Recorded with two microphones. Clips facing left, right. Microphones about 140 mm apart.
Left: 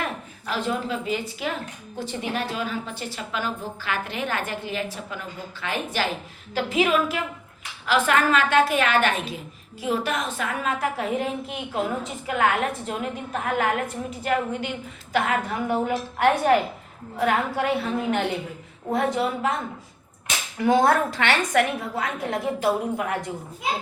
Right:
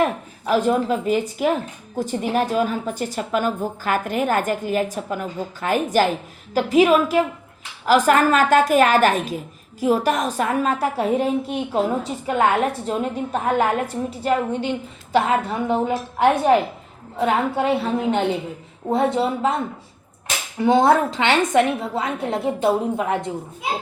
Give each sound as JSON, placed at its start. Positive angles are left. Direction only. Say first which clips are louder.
{"t": 0.5, "sound": "a woman's voice", "louder": "right 8 dB", "side_deg": -45}